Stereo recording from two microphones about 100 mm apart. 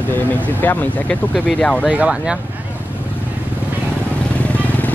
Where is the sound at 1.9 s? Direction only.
10° right (ahead or behind).